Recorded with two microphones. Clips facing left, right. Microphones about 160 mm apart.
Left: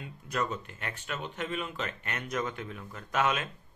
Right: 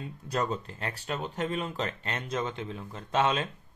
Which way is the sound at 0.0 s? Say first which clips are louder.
Right 2 dB; 35° right (ahead or behind).